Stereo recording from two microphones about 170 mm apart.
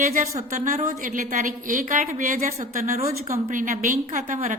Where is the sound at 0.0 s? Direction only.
45° right (ahead or behind).